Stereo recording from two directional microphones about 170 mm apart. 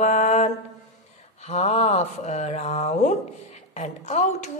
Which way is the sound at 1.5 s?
40° left (ahead or behind).